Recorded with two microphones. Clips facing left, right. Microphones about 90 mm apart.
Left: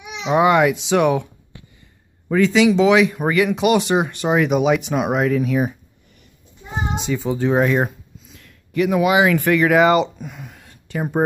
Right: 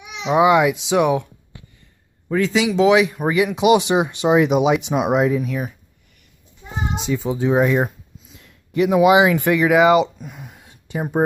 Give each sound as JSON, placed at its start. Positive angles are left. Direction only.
{"t": 0.2, "sound": "speech", "side_deg": -5}
{"t": 2.3, "sound": "speech", "side_deg": -5}
{"t": 7.0, "sound": "speech", "side_deg": 0}
{"t": 8.3, "sound": "speech", "side_deg": -25}
{"t": 10.1, "sound": "a sound", "side_deg": 0}